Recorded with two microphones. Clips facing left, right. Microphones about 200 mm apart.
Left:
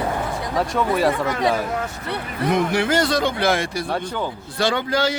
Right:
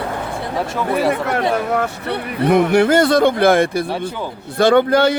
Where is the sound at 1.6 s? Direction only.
65° right (ahead or behind).